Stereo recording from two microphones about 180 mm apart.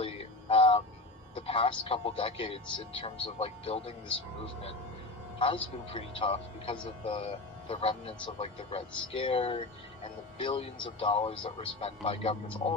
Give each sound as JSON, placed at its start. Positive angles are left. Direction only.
{"t": 0.0, "sound": "synthetic singing", "side_deg": 30}
{"t": 1.4, "sound": "a man's voice", "side_deg": 30}
{"t": 5.9, "sound": "a man's voice", "side_deg": 30}